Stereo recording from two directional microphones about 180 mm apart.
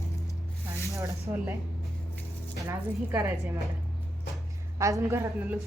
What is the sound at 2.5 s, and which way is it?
Speech, 15° right (ahead or behind).